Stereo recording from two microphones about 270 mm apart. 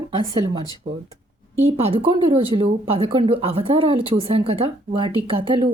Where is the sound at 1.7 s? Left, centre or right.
Right.